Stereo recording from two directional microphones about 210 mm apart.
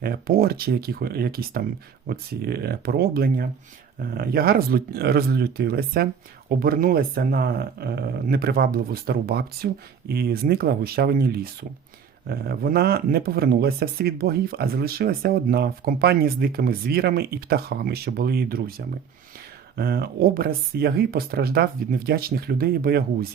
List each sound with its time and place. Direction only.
0.0 s speech: 45° right (ahead or behind)
19.7 s speech: 45° right (ahead or behind)